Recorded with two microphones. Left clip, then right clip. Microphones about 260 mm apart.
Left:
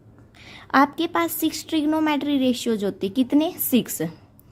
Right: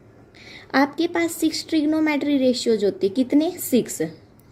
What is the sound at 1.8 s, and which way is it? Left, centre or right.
A woman's voice, left.